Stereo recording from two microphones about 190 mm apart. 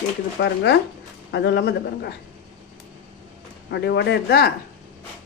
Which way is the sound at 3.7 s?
65° left (ahead or behind).